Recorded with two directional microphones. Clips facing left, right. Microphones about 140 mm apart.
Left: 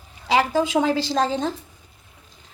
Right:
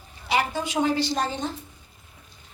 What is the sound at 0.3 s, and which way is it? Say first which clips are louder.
A woman's voice: left 6 dB; 90° left.